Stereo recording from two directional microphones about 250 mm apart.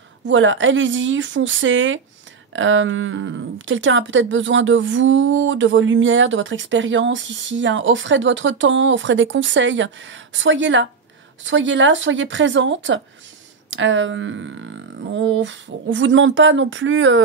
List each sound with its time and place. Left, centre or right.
0.3 s speech: right